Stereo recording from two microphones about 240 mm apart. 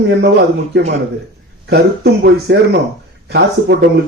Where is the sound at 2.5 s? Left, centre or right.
Right.